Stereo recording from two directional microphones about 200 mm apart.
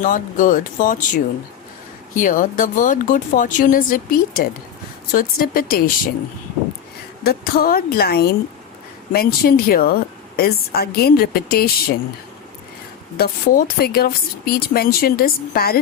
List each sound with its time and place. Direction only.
0.0 s a woman's voice: 40° left (ahead or behind)
7.3 s a woman's voice: 50° left (ahead or behind)
13.1 s a woman's voice: 45° left (ahead or behind)